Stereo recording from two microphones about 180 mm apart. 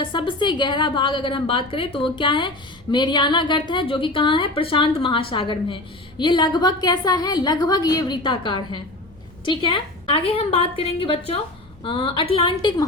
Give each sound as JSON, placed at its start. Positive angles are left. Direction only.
{"t": 0.0, "sound": "a woman's voice", "side_deg": 30}